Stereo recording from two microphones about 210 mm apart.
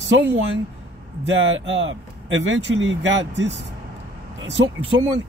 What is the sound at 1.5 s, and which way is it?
Speech, 65° right (ahead or behind).